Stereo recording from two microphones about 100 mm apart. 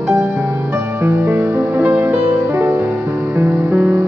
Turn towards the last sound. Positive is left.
turn(degrees=-20)  # may be behind; listen again after turning